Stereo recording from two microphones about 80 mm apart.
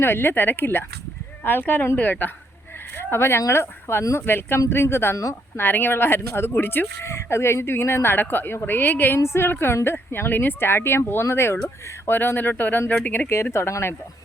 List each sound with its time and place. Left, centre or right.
0.0 s speech: left
5.5 s speech: left